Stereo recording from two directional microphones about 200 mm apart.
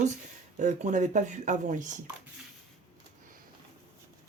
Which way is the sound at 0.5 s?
35° right (ahead or behind).